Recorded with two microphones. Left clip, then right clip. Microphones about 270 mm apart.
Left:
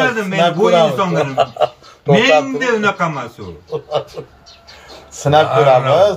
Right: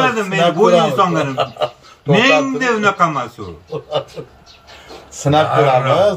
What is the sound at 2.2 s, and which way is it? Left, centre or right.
Speech, right.